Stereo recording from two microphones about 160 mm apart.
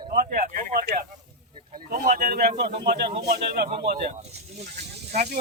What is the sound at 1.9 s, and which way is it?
Speech, 60° right (ahead or behind).